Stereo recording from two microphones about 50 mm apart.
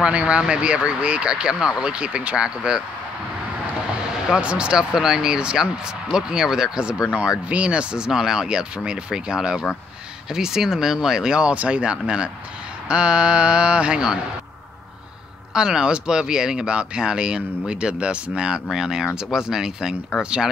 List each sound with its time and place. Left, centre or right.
0.0 s speech: right
4.4 s speech: right
15.5 s speech: centre